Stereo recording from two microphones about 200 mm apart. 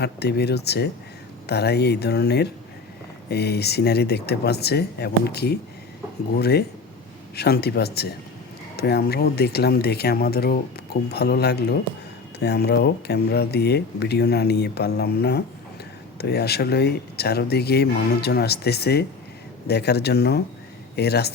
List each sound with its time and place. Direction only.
0.0 s speech: 55° left (ahead or behind)